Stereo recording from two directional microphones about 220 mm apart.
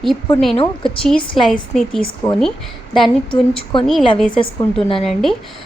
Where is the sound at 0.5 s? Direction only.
20° left (ahead or behind).